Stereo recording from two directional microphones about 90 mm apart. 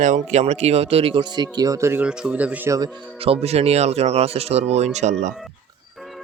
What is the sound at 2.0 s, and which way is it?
Speech, 10° right (ahead or behind).